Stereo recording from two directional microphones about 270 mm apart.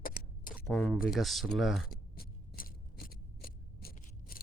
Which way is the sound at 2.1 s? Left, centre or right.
Left.